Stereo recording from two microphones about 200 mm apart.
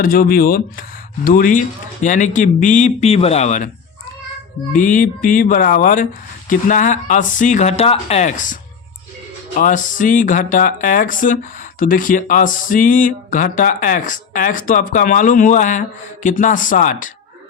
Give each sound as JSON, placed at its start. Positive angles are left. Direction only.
{"t": 0.0, "sound": "speech", "side_deg": 45}
{"t": 4.7, "sound": "speech", "side_deg": 40}
{"t": 9.6, "sound": "speech", "side_deg": 40}